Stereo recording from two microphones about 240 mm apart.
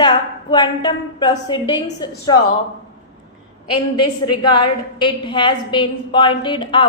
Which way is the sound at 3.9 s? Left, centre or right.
Centre.